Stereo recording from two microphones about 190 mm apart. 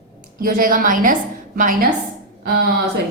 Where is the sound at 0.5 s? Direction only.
45° right (ahead or behind).